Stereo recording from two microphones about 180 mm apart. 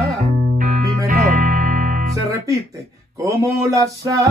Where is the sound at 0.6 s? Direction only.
50° right (ahead or behind).